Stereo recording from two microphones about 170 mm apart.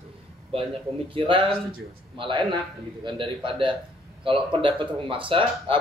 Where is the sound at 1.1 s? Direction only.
30° right (ahead or behind).